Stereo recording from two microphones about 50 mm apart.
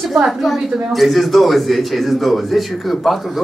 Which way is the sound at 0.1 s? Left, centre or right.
Centre.